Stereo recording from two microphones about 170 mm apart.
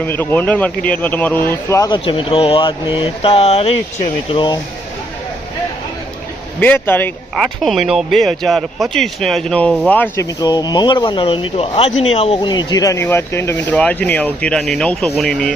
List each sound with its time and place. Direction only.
0.0 s speech: 10° left (ahead or behind); by 4.4 s 40° left (ahead or behind)
4.4 s speech: 25° left (ahead or behind)
6.6 s speech: 10° left (ahead or behind)
7.3 s speech: centre (ahead or behind)
10.2 s speech: 25° left (ahead or behind); by 15.5 s 5° left (ahead or behind)